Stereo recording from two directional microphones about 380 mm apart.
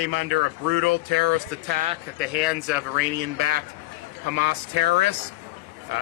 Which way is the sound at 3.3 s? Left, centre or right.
Right.